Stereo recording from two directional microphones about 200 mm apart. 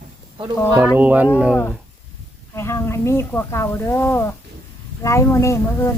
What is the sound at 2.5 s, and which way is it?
Speech, 15° left (ahead or behind).